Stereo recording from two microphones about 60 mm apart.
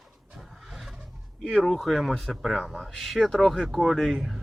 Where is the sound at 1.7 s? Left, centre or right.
Centre.